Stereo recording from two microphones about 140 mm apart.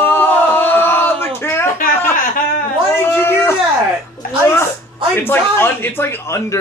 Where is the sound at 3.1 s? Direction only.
15° left (ahead or behind).